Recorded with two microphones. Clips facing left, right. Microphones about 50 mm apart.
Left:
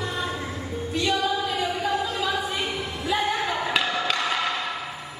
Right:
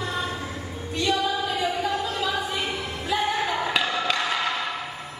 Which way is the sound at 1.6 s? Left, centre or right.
Centre.